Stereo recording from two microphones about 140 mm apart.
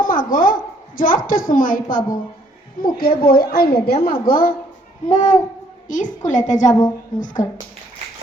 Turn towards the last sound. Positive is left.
turn(degrees=65)  # may be behind; listen again after turning